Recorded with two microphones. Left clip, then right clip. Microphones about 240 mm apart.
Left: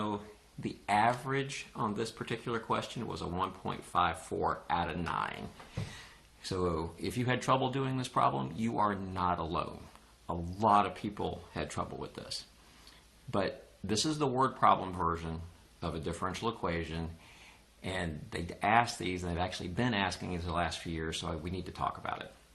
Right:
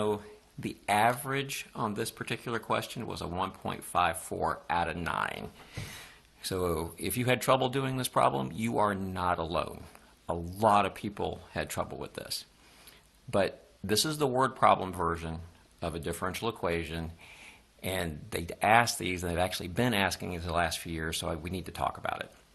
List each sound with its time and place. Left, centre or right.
0.6 s speech: right
13.3 s speech: right